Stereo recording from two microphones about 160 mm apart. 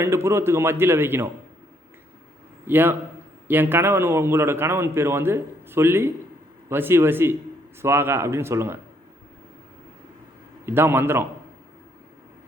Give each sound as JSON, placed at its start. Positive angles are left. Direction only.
{"t": 0.0, "sound": "a man's voice", "side_deg": -15}
{"t": 2.6, "sound": "a man's voice", "side_deg": -10}
{"t": 10.7, "sound": "a man's voice", "side_deg": -15}